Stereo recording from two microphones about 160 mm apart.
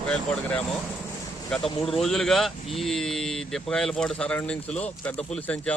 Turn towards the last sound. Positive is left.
turn(degrees=10)  # may be behind; listen again after turning